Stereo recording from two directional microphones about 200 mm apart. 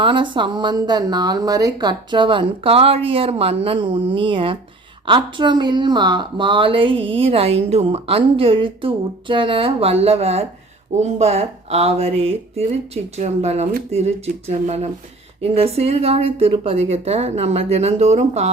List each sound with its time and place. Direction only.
0.0 s a woman's voice: 25° right (ahead or behind)